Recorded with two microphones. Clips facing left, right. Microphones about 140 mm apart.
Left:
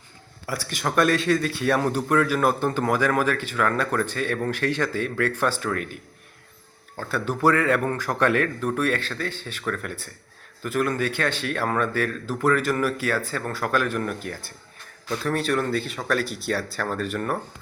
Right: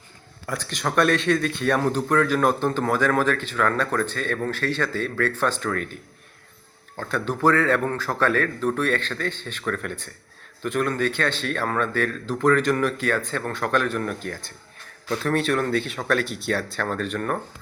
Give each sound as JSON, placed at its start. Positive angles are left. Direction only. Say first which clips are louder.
{"t": 0.4, "sound": "a man's voice", "louder": "even", "side_deg": 5}